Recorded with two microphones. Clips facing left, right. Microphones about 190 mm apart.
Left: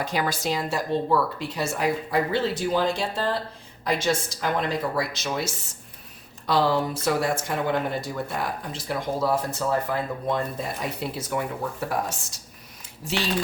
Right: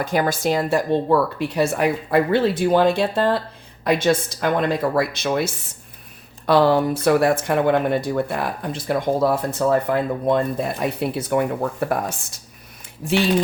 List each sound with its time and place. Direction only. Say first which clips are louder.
0.0 s speech: right 6 dB; 50° right (ahead or behind)